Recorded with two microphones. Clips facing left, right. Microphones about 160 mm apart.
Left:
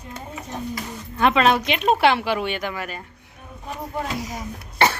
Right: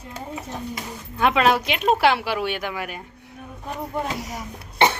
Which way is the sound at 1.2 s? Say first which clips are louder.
Left 1 dB; 5° right (ahead or behind).